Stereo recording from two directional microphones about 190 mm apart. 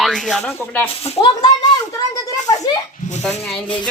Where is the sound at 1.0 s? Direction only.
30° left (ahead or behind).